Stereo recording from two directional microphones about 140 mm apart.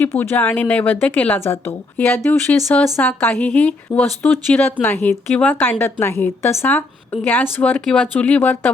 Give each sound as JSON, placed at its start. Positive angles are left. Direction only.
{"t": 0.0, "sound": "a woman's voice", "side_deg": 15}